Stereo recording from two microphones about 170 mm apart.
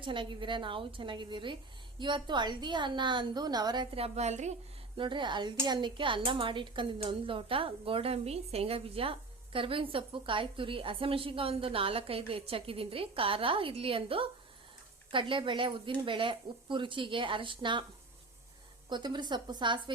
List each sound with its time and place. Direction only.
0.0 s speech: 30° right (ahead or behind)
4.9 s speech: 30° right (ahead or behind)
18.9 s speech: 25° right (ahead or behind)